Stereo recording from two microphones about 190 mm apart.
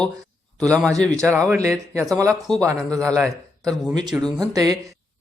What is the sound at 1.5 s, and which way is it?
Speech, 15° right (ahead or behind).